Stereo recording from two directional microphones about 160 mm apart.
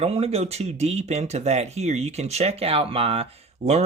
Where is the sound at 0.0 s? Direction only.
40° right (ahead or behind).